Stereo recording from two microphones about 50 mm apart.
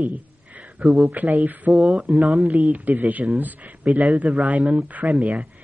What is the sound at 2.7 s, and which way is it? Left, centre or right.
Speech, right.